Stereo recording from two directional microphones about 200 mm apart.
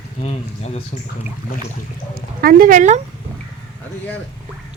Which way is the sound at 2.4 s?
45° right (ahead or behind).